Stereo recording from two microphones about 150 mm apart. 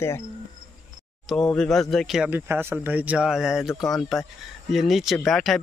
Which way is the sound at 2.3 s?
15° right (ahead or behind).